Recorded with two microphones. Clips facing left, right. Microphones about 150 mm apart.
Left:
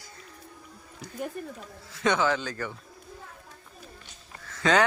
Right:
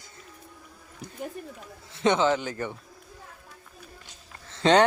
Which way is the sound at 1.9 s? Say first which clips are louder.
Right 3 dB; 25° right (ahead or behind).